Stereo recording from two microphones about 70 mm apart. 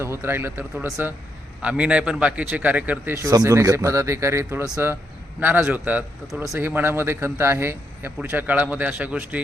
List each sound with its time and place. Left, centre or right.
0.0 s speech: right
1.6 s a man's voice: centre
3.3 s speech: right
5.4 s a man's voice: right